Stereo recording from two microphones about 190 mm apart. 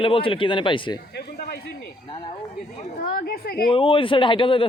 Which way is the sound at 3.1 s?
55° left (ahead or behind).